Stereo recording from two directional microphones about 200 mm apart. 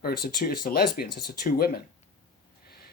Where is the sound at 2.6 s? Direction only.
50° left (ahead or behind).